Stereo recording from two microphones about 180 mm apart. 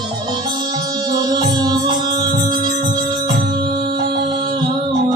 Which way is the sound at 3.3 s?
60° right (ahead or behind).